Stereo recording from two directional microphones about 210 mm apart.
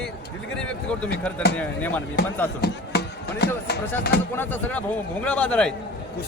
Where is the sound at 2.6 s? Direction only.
50° left (ahead or behind).